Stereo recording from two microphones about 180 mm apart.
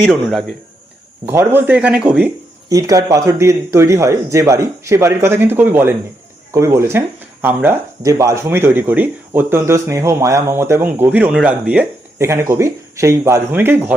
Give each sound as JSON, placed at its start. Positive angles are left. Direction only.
{"t": 0.1, "sound": "a man's voice", "side_deg": 0}
{"t": 1.2, "sound": "speech", "side_deg": -10}
{"t": 2.6, "sound": "speech", "side_deg": -20}